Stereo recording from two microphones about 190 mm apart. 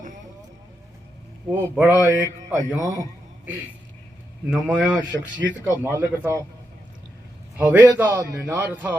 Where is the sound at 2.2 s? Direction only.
15° left (ahead or behind).